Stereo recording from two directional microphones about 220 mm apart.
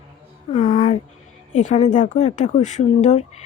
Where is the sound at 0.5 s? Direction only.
25° left (ahead or behind).